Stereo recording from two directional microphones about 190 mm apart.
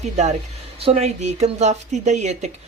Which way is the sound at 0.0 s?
35° right (ahead or behind).